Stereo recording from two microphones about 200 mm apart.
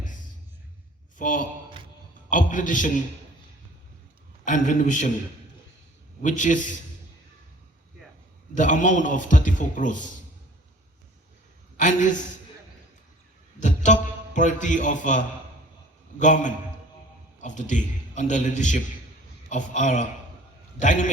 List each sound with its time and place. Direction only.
1.2 s a man's voice: 40° left (ahead or behind)
4.4 s a man's voice: 40° left (ahead or behind)
6.2 s a man's voice: 40° left (ahead or behind)
8.5 s a man's voice: 40° left (ahead or behind)
11.8 s a man's voice: 40° left (ahead or behind)
13.6 s a man's voice: 40° left (ahead or behind)